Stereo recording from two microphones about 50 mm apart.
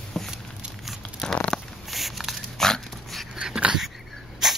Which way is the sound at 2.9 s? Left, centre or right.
Centre.